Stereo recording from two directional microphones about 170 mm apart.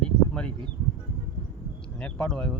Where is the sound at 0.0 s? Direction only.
5° left (ahead or behind).